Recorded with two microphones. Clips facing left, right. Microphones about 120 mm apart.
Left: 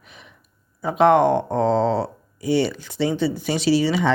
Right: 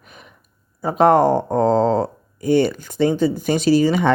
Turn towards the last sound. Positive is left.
turn(degrees=-50)  # may be behind; listen again after turning